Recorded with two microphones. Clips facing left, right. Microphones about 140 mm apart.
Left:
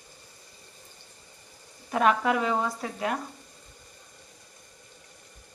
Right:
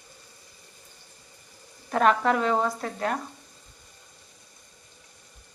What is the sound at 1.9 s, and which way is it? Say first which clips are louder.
Speech: right 2 dB; 5° left (ahead or behind).